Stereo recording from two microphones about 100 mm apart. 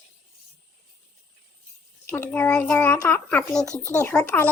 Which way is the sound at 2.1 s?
20° left (ahead or behind).